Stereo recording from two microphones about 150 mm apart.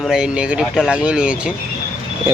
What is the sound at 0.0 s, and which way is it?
Speech, 5° right (ahead or behind).